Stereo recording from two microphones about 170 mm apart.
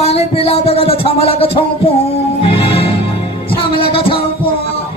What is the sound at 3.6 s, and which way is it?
Heart murmur, 30° left (ahead or behind).